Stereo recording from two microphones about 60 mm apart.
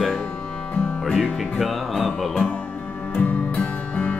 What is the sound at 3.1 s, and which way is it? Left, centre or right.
Music, left.